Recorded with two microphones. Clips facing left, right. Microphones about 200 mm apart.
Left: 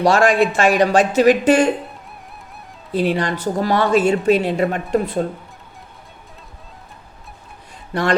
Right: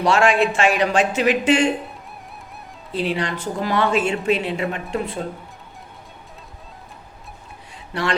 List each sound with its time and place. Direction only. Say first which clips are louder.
0.0 s a woman's voice: left 3 dB; 40° left (ahead or behind)
2.9 s a woman's voice: left 4 dB; 45° left (ahead or behind)